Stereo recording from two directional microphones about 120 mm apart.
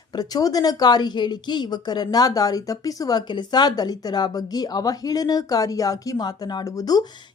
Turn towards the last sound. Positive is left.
turn(degrees=30)  # may be behind; listen again after turning